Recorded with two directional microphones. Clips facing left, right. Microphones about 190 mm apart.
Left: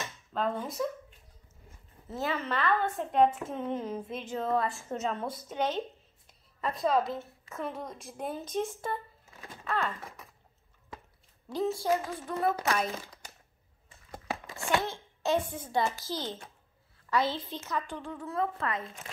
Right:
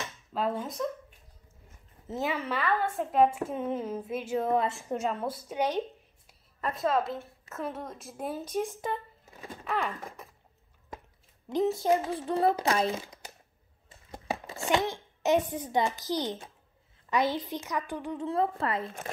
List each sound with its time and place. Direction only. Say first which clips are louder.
0.0 s a sound: right 1 dB; 5° right (ahead or behind)
2.0 s a woman's voice: right 1 dB; 15° right (ahead or behind)
6.6 s a woman's voice: even; centre (ahead or behind)
11.4 s a child's voice: right 3 dB; 20° right (ahead or behind)
14.1 s a sound: right 3 dB; 25° right (ahead or behind)
17.1 s a woman's voice: right 2 dB; 15° right (ahead or behind)
18.2 s a woman's voice: right 3 dB; 30° right (ahead or behind)